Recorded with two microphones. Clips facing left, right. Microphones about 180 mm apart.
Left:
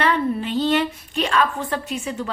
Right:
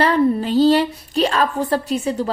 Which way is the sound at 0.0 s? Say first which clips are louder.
Right 5 dB; 35° right (ahead or behind).